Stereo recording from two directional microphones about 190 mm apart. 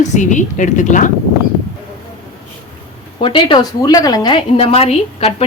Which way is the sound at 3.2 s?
25° left (ahead or behind).